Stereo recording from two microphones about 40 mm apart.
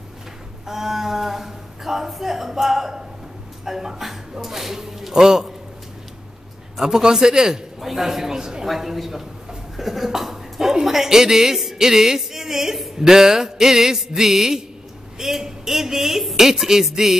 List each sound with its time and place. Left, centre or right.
0.7 s a man's voice: centre
6.8 s speech: centre
7.8 s a sound: centre
8.6 s a woman's voice: centre
9.8 s a sound: centre
12.9 s speech: centre